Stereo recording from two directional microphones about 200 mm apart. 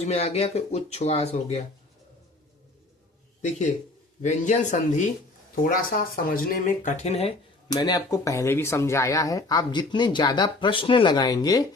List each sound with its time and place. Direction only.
0.0 s speech: 30° left (ahead or behind)
3.4 s speech: 35° left (ahead or behind)
7.7 s speech: 20° left (ahead or behind)